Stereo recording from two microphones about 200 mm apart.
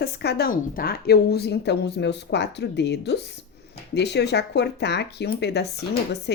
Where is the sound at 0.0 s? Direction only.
55° left (ahead or behind).